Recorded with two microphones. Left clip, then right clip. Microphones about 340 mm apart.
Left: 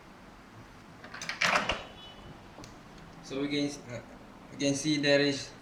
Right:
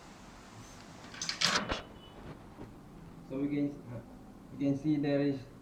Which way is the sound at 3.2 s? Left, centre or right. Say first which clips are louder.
Left 3 dB; left.